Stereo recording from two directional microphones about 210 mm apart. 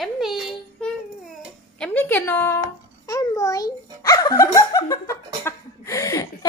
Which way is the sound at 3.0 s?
15° left (ahead or behind).